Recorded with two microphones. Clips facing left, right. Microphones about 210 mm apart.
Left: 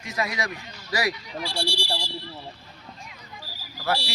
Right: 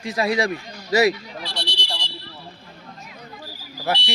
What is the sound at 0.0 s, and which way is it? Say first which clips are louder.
A man's voice: right 8 dB; 30° right (ahead or behind).